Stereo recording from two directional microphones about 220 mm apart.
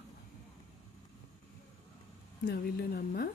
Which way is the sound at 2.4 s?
45° left (ahead or behind).